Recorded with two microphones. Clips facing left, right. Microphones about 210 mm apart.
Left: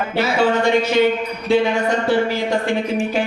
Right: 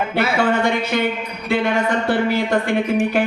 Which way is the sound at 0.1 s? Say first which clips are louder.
Left 3 dB; 55° right (ahead or behind).